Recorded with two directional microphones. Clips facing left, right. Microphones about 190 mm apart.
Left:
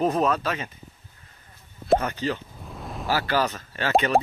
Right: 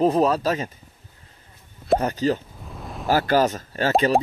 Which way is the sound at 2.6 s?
Centre (ahead or behind).